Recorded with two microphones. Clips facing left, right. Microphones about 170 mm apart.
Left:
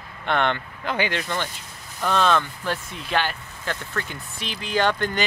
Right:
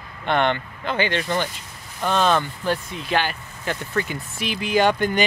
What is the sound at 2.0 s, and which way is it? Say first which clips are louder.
Speech: right 1 dB; 5° right (ahead or behind).